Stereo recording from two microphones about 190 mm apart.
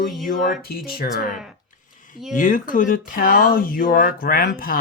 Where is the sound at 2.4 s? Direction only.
45° left (ahead or behind).